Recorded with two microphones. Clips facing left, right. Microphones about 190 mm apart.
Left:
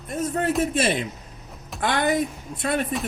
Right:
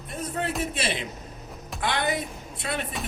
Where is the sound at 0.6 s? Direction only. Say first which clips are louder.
Left 7 dB; 45° left (ahead or behind).